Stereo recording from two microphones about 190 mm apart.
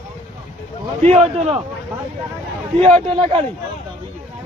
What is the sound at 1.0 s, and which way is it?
Speech, 35° right (ahead or behind).